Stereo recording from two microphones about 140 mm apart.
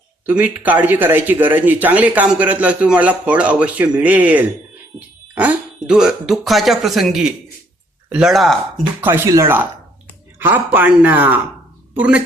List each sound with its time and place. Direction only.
0.3 s speech: 10° right (ahead or behind)
9.0 s speech: 15° right (ahead or behind)